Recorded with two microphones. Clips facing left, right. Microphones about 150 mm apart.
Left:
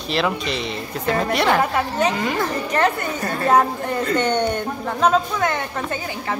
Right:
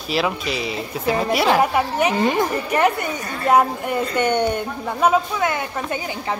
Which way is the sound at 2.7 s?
10° right (ahead or behind).